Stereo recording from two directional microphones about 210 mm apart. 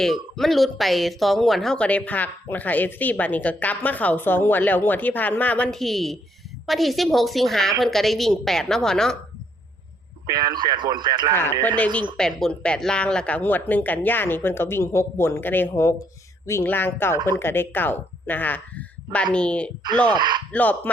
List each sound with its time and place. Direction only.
0.0 s a woman's voice: centre (ahead or behind)
10.2 s speech: 20° right (ahead or behind)
11.3 s speech: 10° left (ahead or behind)
20.1 s speech: 20° right (ahead or behind)
20.5 s speech: 5° left (ahead or behind)